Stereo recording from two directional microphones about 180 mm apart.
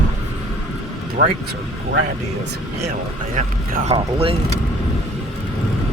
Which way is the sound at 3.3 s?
45° right (ahead or behind).